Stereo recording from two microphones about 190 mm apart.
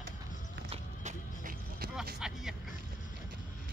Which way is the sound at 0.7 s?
40° right (ahead or behind).